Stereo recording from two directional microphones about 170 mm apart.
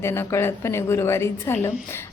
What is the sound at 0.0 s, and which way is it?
A woman's voice, 15° left (ahead or behind).